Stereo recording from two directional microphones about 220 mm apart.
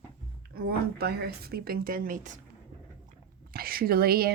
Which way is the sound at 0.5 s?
45° right (ahead or behind).